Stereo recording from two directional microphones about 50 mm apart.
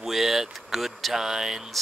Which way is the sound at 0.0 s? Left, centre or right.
Centre.